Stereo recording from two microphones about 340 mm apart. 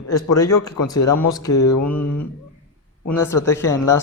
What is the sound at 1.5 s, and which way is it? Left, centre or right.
Mantra, left.